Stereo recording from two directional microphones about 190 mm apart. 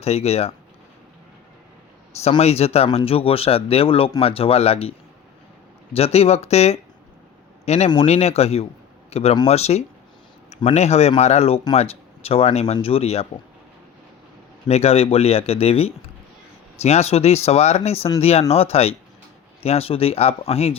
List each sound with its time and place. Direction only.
0.0 s speech: 35° left (ahead or behind)
2.2 s a man's voice: 35° left (ahead or behind)
14.7 s speech: 35° left (ahead or behind)